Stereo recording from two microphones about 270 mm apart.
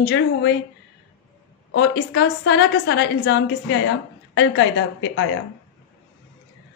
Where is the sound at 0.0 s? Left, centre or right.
Left.